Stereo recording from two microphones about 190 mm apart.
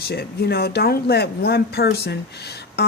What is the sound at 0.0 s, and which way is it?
Speech, 55° left (ahead or behind).